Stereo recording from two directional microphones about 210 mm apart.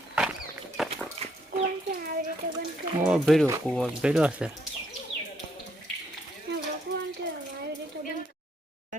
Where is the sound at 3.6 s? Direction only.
Centre (ahead or behind).